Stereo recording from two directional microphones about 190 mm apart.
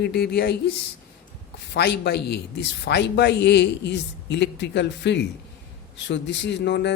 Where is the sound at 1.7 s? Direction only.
60° left (ahead or behind).